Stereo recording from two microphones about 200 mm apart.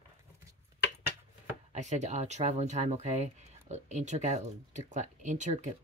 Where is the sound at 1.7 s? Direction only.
35° right (ahead or behind).